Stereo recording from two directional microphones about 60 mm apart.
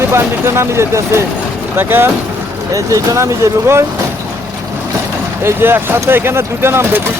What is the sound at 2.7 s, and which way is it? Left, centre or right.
Speech, right.